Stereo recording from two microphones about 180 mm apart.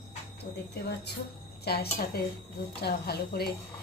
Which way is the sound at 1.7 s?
60° left (ahead or behind).